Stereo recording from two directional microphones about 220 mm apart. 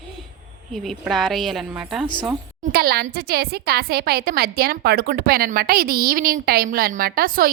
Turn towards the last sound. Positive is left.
turn(degrees=-40)  # may be behind; listen again after turning